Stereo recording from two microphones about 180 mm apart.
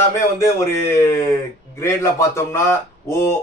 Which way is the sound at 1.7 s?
15° left (ahead or behind).